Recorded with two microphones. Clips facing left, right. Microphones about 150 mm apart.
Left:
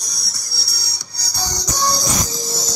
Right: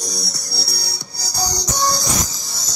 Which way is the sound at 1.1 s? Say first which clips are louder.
Right 3 dB; 45° right (ahead or behind).